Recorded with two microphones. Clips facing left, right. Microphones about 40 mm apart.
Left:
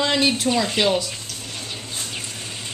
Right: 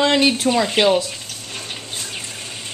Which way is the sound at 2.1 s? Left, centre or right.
Centre.